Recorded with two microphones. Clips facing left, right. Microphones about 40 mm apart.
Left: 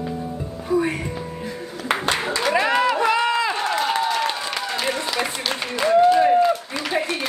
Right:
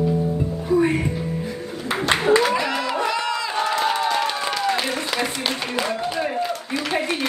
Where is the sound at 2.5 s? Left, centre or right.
Left.